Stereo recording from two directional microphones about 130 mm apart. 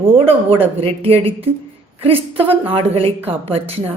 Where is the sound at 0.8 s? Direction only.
50° right (ahead or behind).